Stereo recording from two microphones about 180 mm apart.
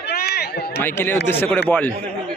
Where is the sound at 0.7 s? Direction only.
10° left (ahead or behind).